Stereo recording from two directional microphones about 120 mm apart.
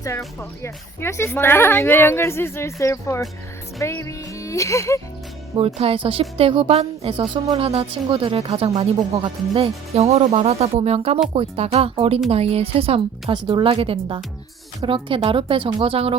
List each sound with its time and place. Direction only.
0.0 s speech: 25° left (ahead or behind)
5.5 s speech: 55° right (ahead or behind)